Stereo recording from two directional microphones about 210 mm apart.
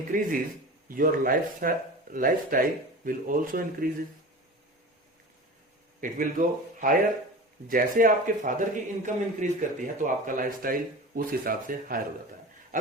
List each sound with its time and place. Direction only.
0.1 s speech: 40° right (ahead or behind)
6.0 s speech: 40° right (ahead or behind)